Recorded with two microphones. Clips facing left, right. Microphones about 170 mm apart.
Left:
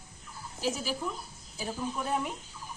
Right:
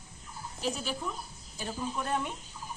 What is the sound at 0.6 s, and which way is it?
A woman's voice, 5° left (ahead or behind).